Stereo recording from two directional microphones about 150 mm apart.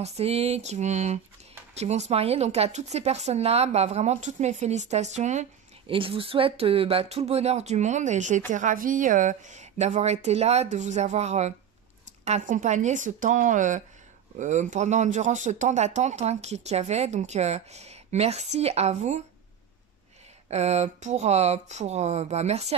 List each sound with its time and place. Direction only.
0.0 s speech: 45° right (ahead or behind)
5.9 s speech: 35° right (ahead or behind)
20.4 s speech: 45° right (ahead or behind)